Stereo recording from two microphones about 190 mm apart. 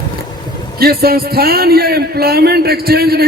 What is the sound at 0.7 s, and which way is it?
A man's voice, 55° right (ahead or behind).